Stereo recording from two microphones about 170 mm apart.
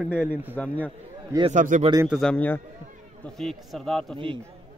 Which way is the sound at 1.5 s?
50° right (ahead or behind).